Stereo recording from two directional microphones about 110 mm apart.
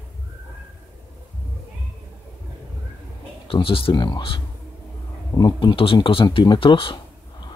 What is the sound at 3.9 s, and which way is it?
Speech, 40° left (ahead or behind).